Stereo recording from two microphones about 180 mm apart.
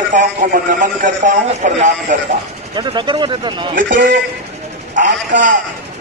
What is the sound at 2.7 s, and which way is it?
Speech, 25° right (ahead or behind).